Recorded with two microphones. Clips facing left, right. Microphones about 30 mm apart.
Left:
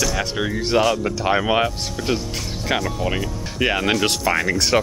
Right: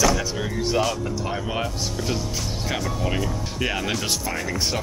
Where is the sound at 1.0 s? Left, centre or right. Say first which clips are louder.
Left 8 dB; left.